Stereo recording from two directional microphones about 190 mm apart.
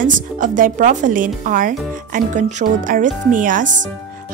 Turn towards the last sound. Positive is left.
turn(degrees=-45)  # may be behind; listen again after turning